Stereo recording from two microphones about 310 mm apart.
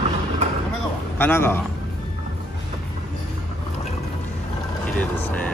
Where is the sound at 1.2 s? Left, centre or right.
Centre.